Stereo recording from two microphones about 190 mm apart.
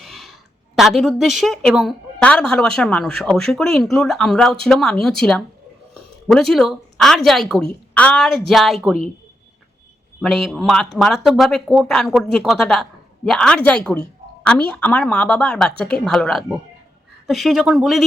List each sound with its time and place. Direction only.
0.0 s a sound: centre (ahead or behind)
0.8 s a woman's voice: centre (ahead or behind)
10.2 s a woman's voice: centre (ahead or behind)